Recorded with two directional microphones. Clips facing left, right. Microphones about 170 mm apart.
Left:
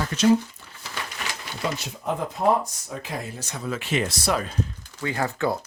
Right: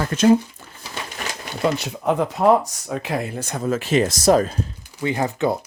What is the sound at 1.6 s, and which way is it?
Speech, 70° right (ahead or behind).